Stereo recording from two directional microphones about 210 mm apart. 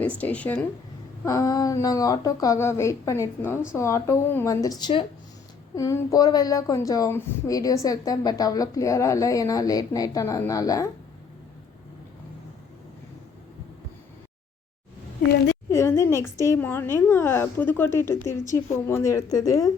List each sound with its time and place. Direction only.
0.2 s speech: 10° left (ahead or behind)
15.7 s speech: 15° left (ahead or behind)